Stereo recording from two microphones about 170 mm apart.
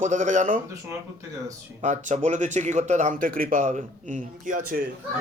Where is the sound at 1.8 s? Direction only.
45° right (ahead or behind).